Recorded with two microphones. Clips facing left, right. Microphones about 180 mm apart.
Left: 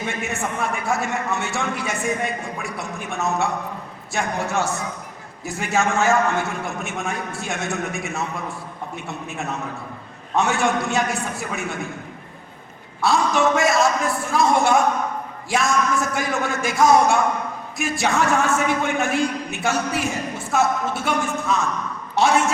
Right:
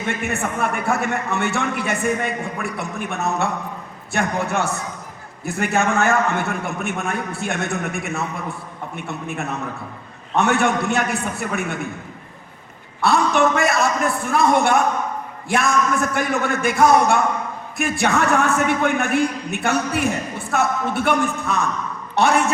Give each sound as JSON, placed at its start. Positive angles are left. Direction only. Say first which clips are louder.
{"t": 0.1, "sound": "a man's voice", "louder": "right 3 dB", "side_deg": -60}
{"t": 13.0, "sound": "a man's voice", "louder": "right 2 dB", "side_deg": -60}